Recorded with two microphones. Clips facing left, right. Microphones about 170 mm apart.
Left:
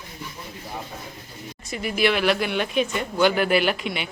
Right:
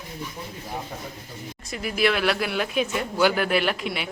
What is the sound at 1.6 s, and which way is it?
Speech, centre (ahead or behind).